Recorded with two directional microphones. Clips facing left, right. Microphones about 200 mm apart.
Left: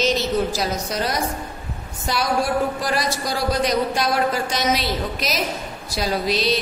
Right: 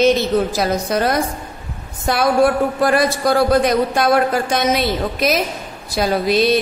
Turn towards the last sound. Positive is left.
turn(degrees=-55)  # may be behind; listen again after turning